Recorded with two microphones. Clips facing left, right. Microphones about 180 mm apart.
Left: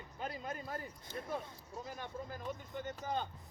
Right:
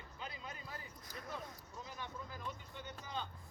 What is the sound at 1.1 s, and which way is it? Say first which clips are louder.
Speech: left 4 dB; 25° left (ahead or behind).